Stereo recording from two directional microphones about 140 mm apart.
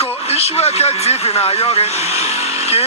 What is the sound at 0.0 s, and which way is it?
Speech, 45° left (ahead or behind).